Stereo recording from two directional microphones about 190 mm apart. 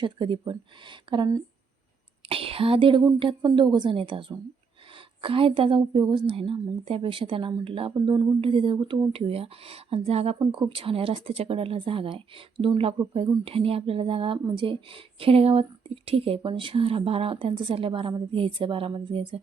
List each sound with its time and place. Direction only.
0.0 s a woman's voice: 25° right (ahead or behind)